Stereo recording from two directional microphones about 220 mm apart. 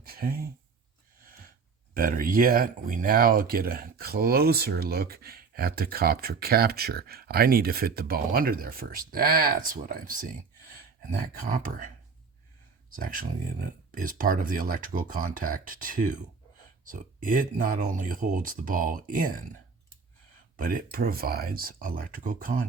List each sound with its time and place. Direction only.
0.0 s a sound: 45° right (ahead or behind)
1.9 s speech: 40° right (ahead or behind)
11.3 s speech: 35° right (ahead or behind)
13.0 s speech: 40° right (ahead or behind)
20.6 s speech: 40° right (ahead or behind)